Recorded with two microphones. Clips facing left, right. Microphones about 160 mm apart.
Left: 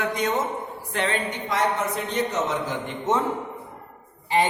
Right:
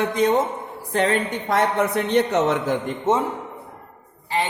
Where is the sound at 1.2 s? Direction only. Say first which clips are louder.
Right 3 dB; 55° right (ahead or behind).